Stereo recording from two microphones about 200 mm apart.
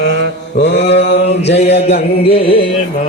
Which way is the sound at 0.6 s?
60° left (ahead or behind).